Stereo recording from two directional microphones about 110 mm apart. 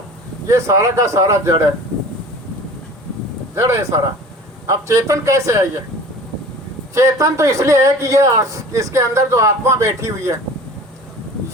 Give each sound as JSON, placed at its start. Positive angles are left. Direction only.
{"t": 0.4, "sound": "speech", "side_deg": -25}
{"t": 3.5, "sound": "speech", "side_deg": -25}
{"t": 6.9, "sound": "speech", "side_deg": -30}